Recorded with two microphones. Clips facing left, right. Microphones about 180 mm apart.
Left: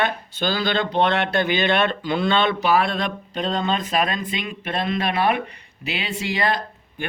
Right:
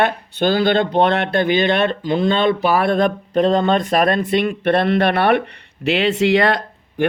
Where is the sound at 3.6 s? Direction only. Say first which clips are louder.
Right 7 dB; 60° right (ahead or behind).